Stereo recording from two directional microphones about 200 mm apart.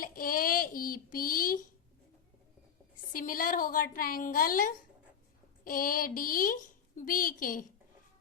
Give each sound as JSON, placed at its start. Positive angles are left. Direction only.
{"t": 0.0, "sound": "child singing", "side_deg": 45}
{"t": 3.1, "sound": "a woman's voice", "side_deg": 45}